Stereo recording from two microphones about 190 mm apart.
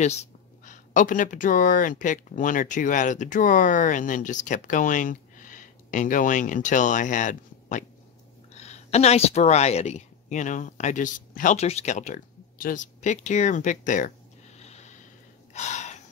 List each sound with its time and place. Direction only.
0.0 s speech: 35° left (ahead or behind)
14.6 s a sound: 35° left (ahead or behind)
15.5 s gasp: 40° left (ahead or behind)